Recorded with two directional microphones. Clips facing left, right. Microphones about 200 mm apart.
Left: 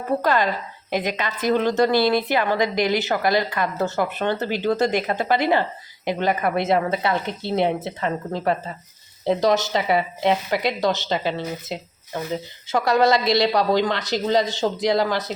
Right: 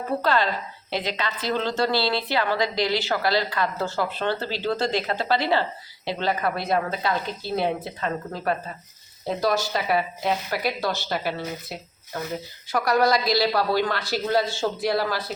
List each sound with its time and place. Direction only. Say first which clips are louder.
0.2 s a woman's voice: left 2 dB; 15° left (ahead or behind)